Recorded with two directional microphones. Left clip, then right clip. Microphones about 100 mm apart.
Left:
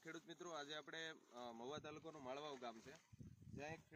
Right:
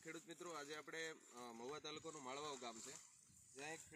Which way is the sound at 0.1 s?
15° right (ahead or behind).